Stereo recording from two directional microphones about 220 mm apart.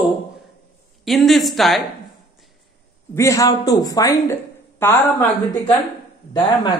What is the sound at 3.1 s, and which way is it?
A man's voice, 15° left (ahead or behind).